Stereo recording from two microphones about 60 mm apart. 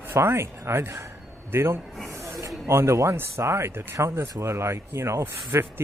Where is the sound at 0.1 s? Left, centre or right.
Right.